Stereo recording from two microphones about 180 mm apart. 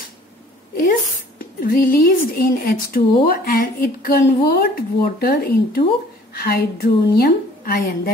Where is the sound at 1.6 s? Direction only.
50° left (ahead or behind).